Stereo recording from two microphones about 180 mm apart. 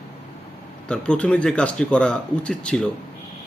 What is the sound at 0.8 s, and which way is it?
Speech, 5° left (ahead or behind).